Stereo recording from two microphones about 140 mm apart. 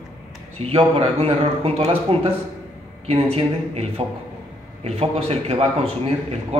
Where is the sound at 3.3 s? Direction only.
45° right (ahead or behind).